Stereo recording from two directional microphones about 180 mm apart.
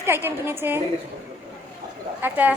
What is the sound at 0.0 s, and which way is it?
Speech, 15° right (ahead or behind).